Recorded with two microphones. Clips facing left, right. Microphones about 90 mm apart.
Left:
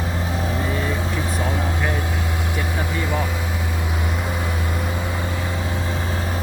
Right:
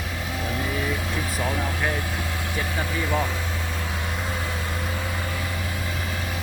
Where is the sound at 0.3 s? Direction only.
30° left (ahead or behind).